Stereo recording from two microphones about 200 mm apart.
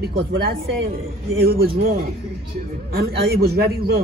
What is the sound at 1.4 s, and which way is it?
Speech, 50° right (ahead or behind).